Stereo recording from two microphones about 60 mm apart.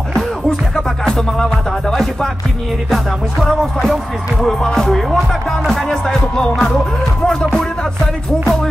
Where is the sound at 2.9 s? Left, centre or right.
Centre.